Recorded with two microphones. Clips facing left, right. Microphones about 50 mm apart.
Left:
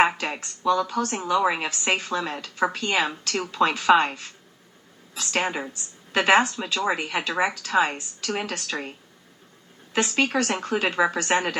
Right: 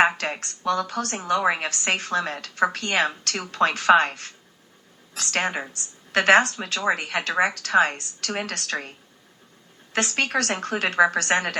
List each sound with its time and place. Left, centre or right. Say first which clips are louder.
0.2 s a woman's voice: even; right
9.9 s a woman's voice: left 1 dB; right